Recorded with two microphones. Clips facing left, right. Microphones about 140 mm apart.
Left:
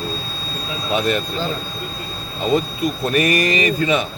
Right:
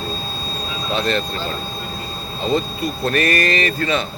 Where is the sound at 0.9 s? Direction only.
10° left (ahead or behind).